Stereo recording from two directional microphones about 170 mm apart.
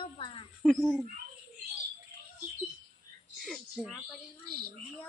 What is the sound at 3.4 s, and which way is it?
Speech, centre (ahead or behind).